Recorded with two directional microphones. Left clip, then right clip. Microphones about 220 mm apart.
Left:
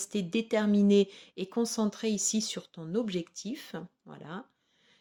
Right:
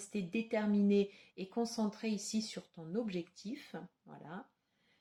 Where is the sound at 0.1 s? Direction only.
45° left (ahead or behind).